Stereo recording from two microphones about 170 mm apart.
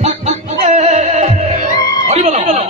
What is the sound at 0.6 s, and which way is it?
Music, 40° right (ahead or behind).